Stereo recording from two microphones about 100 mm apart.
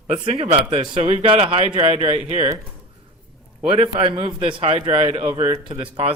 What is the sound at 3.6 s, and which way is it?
A man's voice, 75° right (ahead or behind).